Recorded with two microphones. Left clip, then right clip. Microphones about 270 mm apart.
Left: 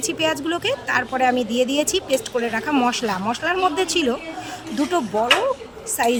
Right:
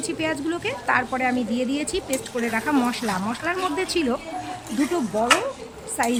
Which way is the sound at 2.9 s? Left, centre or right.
Centre.